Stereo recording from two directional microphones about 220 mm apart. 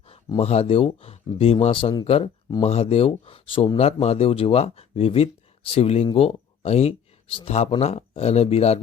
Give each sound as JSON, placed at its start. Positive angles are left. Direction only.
{"t": 0.1, "sound": "speech", "side_deg": 25}